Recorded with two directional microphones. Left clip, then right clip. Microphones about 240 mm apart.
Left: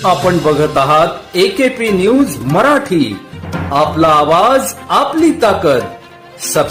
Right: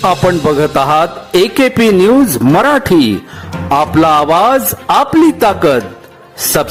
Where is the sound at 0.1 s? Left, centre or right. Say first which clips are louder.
Even; right.